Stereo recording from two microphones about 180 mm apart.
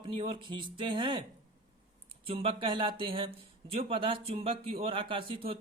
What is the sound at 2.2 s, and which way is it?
Speech, 30° right (ahead or behind).